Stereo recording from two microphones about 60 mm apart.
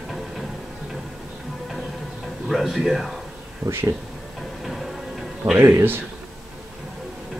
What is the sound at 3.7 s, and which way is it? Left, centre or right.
Speech, right.